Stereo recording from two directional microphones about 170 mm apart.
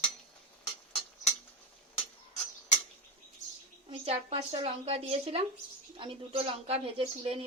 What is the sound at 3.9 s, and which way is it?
Speech, 35° right (ahead or behind).